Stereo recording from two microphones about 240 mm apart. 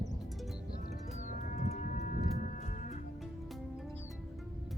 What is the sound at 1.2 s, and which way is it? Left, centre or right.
Moo, left.